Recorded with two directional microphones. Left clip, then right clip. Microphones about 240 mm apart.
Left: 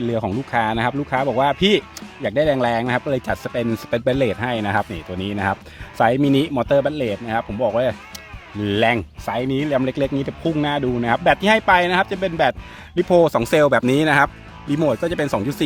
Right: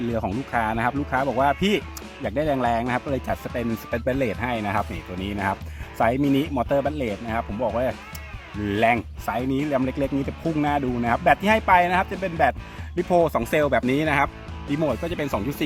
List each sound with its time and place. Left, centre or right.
0.1 s speech: left